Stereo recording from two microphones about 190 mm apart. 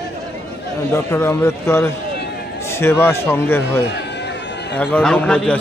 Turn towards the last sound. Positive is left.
turn(degrees=5)  # may be behind; listen again after turning